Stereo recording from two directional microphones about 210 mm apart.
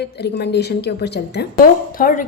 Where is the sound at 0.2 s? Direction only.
50° left (ahead or behind).